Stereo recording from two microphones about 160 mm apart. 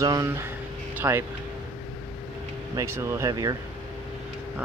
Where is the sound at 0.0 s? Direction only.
20° right (ahead or behind).